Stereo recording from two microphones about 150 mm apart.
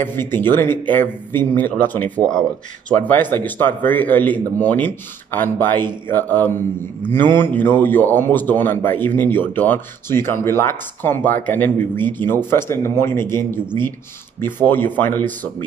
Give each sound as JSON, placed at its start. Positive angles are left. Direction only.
{"t": 0.0, "sound": "speech", "side_deg": 15}
{"t": 15.0, "sound": "speech", "side_deg": 15}